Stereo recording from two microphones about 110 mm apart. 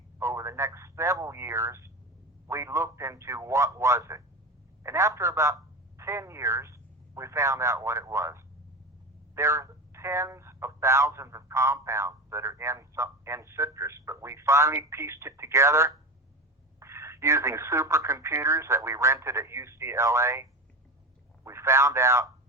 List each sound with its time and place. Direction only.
0.2 s speech: 25° right (ahead or behind)